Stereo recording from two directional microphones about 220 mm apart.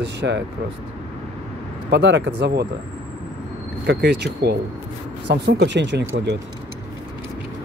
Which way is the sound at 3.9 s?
50° right (ahead or behind).